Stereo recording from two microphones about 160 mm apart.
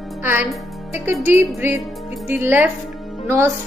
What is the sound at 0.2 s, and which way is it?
Speech, 15° right (ahead or behind).